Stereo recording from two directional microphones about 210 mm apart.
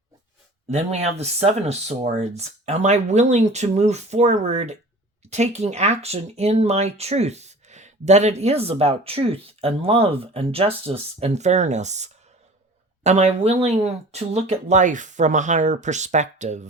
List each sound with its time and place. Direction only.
0.7 s speech: 30° right (ahead or behind)